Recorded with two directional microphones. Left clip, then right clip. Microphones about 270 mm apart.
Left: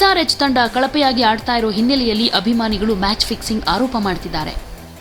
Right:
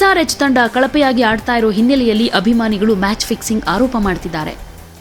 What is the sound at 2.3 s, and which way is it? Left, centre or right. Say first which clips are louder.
A woman's voice: right 3 dB; centre.